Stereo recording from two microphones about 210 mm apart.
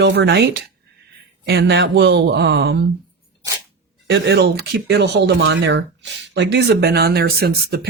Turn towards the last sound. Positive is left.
turn(degrees=-50)  # may be behind; listen again after turning